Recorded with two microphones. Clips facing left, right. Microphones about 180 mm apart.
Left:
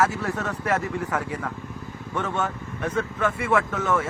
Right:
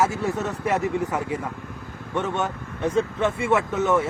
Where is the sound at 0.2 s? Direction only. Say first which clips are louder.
Right 3 dB; 20° right (ahead or behind).